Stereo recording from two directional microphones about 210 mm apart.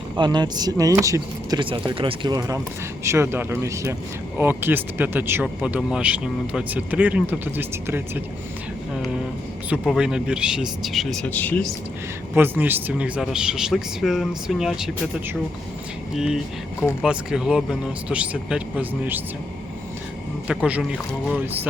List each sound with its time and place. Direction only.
0.2 s speech: 20° right (ahead or behind)
9.6 s speech: 5° right (ahead or behind)
12.3 s speech: 10° right (ahead or behind)
20.5 s speech: 5° right (ahead or behind)